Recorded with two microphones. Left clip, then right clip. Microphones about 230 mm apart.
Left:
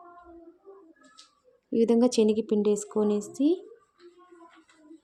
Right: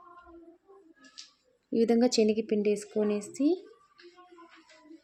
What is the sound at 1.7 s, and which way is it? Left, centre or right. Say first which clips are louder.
Speech: left 2 dB; centre.